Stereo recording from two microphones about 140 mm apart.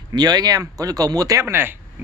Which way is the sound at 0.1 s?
30° right (ahead or behind).